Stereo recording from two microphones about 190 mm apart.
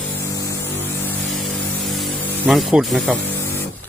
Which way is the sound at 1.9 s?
Centre (ahead or behind).